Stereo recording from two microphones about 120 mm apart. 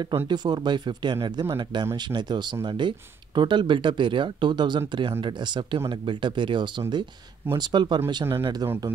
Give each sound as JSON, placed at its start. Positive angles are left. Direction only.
{"t": 0.3, "sound": "speech", "side_deg": -35}